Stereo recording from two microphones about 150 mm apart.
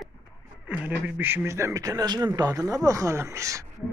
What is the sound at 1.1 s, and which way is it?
A man's voice, 10° right (ahead or behind).